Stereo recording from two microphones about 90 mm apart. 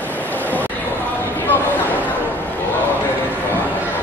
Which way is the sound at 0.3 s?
20° left (ahead or behind).